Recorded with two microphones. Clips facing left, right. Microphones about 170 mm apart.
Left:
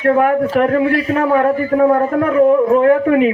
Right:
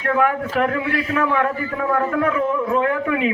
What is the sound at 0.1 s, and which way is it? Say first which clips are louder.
Speech: left 6 dB; 35° left (ahead or behind).